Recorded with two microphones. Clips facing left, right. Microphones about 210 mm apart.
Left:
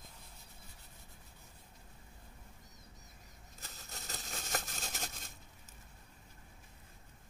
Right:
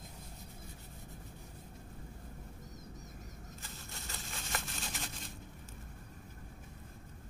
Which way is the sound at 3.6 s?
40° left (ahead or behind).